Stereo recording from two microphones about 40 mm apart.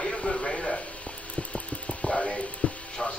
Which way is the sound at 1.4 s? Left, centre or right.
Left.